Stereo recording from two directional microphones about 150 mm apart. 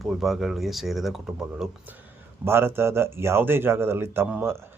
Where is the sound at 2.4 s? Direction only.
15° right (ahead or behind).